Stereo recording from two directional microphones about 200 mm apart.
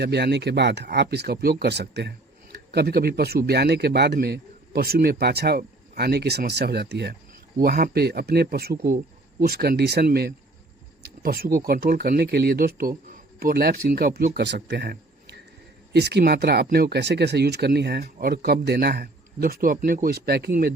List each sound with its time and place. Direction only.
0.0 s speech: 55° right (ahead or behind)